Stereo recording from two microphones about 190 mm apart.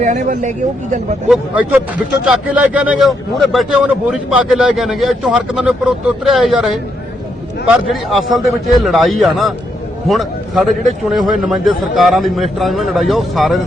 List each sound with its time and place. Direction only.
0.0 s speech: 40° right (ahead or behind)
1.3 s a man's voice: 10° right (ahead or behind)
7.7 s a man's voice: centre (ahead or behind)